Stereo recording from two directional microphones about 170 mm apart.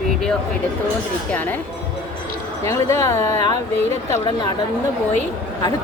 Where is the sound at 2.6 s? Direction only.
15° left (ahead or behind).